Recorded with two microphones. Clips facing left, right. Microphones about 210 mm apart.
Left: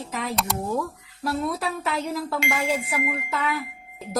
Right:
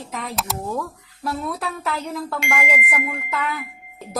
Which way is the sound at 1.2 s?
Centre (ahead or behind).